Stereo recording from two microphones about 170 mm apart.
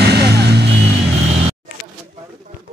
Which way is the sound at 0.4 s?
75° right (ahead or behind).